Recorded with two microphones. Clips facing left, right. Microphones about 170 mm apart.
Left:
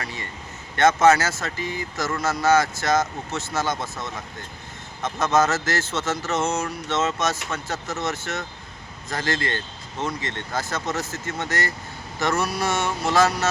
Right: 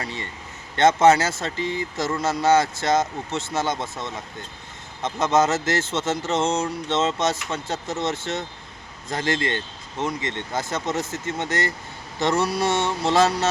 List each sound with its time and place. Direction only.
0.0 s speech: 25° right (ahead or behind)